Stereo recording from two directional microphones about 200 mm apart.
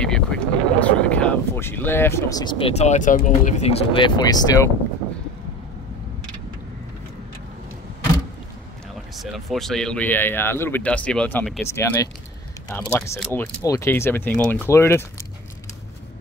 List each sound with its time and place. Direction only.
0.0 s speech: 5° left (ahead or behind)
9.1 s speech: centre (ahead or behind)